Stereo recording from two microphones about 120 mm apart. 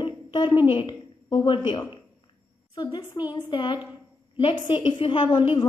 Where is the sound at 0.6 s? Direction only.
45° left (ahead or behind).